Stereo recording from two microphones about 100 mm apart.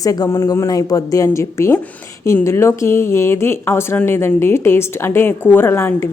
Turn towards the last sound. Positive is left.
turn(degrees=25)  # may be behind; listen again after turning